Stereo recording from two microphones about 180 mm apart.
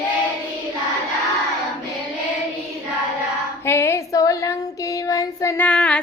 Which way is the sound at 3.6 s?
15° left (ahead or behind).